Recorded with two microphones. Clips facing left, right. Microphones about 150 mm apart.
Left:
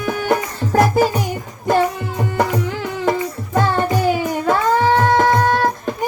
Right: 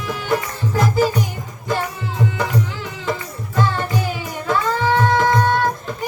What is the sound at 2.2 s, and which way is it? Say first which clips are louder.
Music: left 2 dB; 50° left (ahead or behind).